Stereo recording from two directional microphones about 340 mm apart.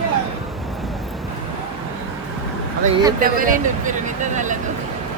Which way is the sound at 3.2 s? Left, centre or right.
Right.